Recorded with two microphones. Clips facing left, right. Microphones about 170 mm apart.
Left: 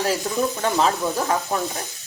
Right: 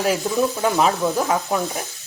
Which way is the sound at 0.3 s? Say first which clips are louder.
Right 2 dB; 10° right (ahead or behind).